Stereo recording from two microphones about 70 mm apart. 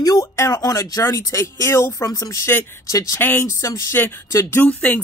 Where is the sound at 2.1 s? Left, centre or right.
Left.